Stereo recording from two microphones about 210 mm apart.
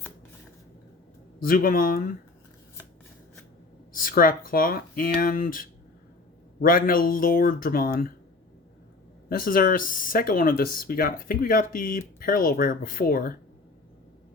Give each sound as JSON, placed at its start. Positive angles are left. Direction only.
{"t": 1.4, "sound": "speech", "side_deg": 45}
{"t": 3.9, "sound": "speech", "side_deg": 40}
{"t": 9.3, "sound": "speech", "side_deg": 45}